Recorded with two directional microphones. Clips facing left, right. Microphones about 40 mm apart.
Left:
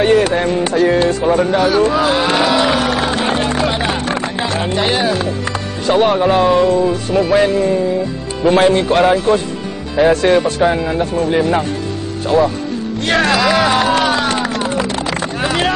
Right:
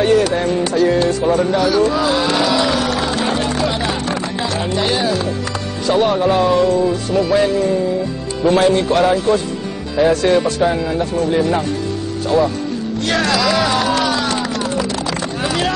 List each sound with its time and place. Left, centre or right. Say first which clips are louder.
0.0 s speech: left 2 dB; left
13.0 s music: left 3 dB; left